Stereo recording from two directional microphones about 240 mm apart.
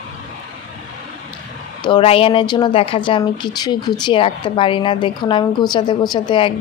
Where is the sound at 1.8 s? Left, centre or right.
Left.